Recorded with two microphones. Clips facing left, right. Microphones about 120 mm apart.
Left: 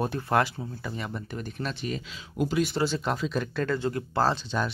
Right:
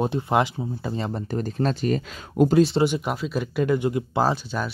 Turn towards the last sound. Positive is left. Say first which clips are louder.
# right 2 dB
turn(degrees=-10)  # may be behind; listen again after turning